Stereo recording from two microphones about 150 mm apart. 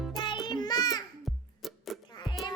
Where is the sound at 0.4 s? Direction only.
30° left (ahead or behind).